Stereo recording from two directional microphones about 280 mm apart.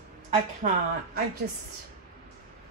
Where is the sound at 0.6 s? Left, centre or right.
Right.